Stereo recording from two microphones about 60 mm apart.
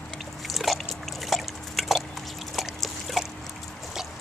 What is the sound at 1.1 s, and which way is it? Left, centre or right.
Liquid, centre.